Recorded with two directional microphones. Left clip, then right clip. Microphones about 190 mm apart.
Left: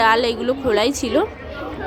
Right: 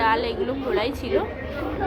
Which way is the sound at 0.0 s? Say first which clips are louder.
Left 6 dB; 40° left (ahead or behind).